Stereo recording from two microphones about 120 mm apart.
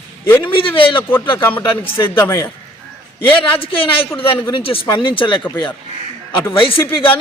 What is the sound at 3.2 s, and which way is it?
A man's voice, 50° left (ahead or behind).